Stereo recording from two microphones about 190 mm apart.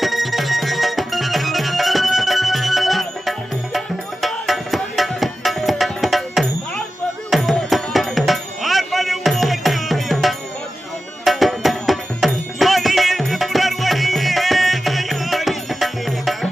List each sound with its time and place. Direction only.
0.0 s music: centre (ahead or behind)